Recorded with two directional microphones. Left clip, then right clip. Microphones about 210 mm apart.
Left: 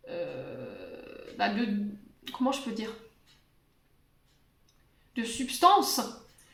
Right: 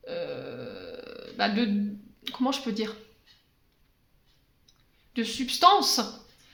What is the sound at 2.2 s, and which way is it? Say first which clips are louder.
Speech: right 2 dB; 45° right (ahead or behind).